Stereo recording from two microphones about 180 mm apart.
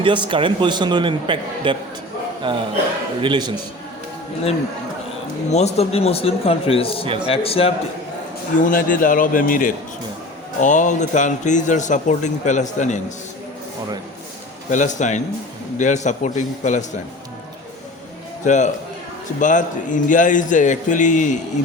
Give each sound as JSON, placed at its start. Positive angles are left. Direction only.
{"t": 0.0, "sound": "a man's voice", "side_deg": -25}
{"t": 5.5, "sound": "a man's voice", "side_deg": 35}
{"t": 8.6, "sound": "speech", "side_deg": 50}
{"t": 14.7, "sound": "speech", "side_deg": 45}
{"t": 18.4, "sound": "a man's voice", "side_deg": 40}